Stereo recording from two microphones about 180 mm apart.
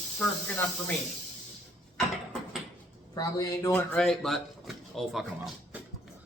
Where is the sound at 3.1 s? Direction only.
20° left (ahead or behind).